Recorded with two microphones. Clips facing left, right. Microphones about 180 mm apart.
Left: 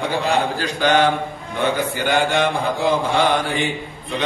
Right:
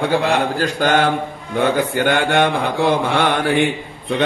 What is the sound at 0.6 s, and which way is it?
Mantra, 50° right (ahead or behind).